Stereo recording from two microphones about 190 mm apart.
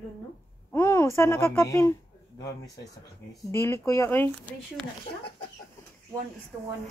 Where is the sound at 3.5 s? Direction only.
15° left (ahead or behind).